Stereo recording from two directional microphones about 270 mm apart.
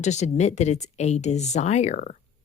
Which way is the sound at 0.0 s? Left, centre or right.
Left.